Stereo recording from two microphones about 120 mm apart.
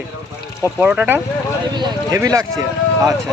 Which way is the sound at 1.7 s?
35° right (ahead or behind).